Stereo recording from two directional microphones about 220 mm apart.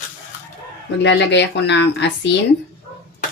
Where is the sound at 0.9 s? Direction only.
55° left (ahead or behind).